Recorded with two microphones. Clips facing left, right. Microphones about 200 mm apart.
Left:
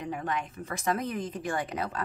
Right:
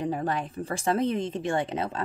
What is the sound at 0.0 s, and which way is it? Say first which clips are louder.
Speech: right 5 dB; 35° right (ahead or behind).